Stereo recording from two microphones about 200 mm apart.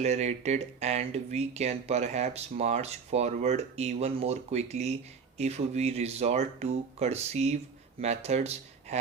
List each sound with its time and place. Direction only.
0.0 s speech: 35° right (ahead or behind)